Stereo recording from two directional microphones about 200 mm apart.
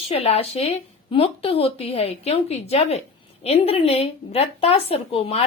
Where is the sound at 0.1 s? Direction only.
30° left (ahead or behind).